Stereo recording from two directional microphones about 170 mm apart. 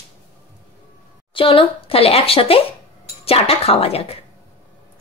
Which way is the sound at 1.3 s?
30° left (ahead or behind).